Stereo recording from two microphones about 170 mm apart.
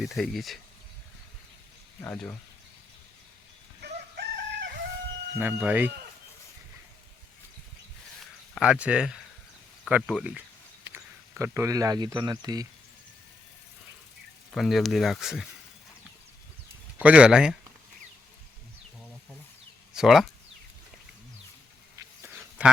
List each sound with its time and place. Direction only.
0.0 s speech: centre (ahead or behind)
2.0 s speech: 10° left (ahead or behind)
3.8 s chicken: 70° right (ahead or behind)
5.4 s speech: 10° right (ahead or behind)
8.2 s a sound: centre (ahead or behind)
9.8 s speech: 5° right (ahead or behind); by 12.6 s 25° right (ahead or behind)
14.5 s speech: centre (ahead or behind)
17.0 s speech: 5° right (ahead or behind)
19.9 s speech: centre (ahead or behind)
22.2 s duck: 10° right (ahead or behind)